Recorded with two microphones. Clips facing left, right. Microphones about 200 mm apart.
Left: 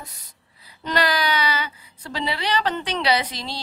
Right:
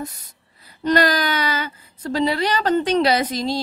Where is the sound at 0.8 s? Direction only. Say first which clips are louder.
Right 5 dB; 45° right (ahead or behind).